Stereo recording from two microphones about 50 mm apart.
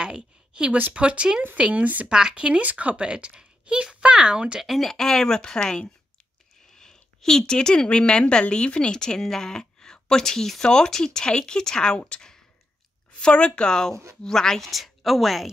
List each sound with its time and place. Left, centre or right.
0.0 s a woman's voice: centre
2.0 s speech: centre
4.6 s speech: centre
14.7 s speech: centre